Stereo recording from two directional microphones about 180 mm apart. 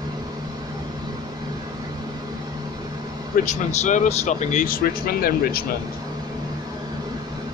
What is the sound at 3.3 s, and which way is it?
Speech, 40° left (ahead or behind).